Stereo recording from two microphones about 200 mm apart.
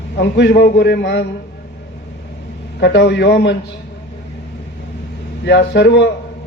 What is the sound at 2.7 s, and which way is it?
Speech, 60° left (ahead or behind).